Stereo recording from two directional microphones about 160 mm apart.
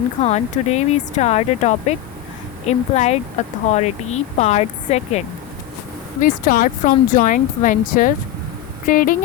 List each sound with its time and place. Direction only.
0.2 s speech: 45° left (ahead or behind)
6.2 s speech: 55° left (ahead or behind)